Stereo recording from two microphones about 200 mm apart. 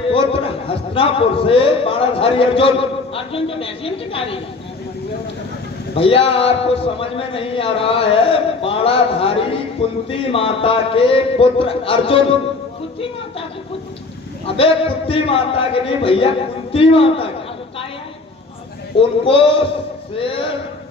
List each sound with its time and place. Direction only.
0.1 s a man's voice: 25° left (ahead or behind)
5.9 s a man's voice: 30° left (ahead or behind)
14.6 s a man's voice: 30° left (ahead or behind)
18.9 s a man's voice: 25° left (ahead or behind)